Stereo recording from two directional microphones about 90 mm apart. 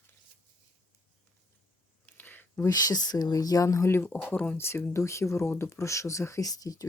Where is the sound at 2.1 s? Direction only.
20° left (ahead or behind).